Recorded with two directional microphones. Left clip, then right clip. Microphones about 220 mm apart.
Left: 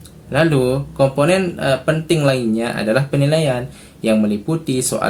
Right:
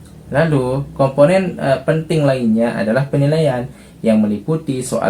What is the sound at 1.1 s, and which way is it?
Speech, 50° left (ahead or behind).